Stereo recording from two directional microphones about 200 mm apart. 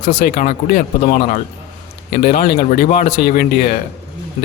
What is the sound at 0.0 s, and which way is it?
Speech, 55° left (ahead or behind).